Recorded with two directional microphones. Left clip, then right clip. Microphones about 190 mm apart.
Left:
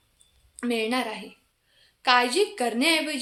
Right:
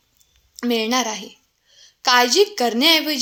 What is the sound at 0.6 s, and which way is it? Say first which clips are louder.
A woman's voice: right 6 dB; 35° right (ahead or behind).